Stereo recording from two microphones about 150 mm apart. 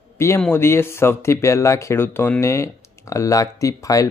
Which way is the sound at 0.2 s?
15° left (ahead or behind).